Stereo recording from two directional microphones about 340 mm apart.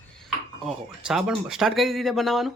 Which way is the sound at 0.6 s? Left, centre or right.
Centre.